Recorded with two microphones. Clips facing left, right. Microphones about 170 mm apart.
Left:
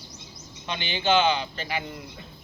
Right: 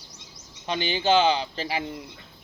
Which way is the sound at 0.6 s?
40° right (ahead or behind).